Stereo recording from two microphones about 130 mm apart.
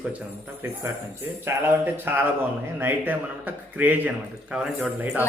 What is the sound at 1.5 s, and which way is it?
Speech, 15° right (ahead or behind).